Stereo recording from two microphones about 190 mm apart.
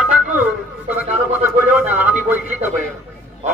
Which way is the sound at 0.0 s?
10° right (ahead or behind).